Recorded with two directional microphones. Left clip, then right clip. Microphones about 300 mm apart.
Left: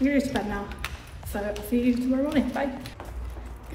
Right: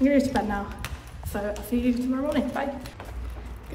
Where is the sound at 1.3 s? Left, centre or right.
Centre.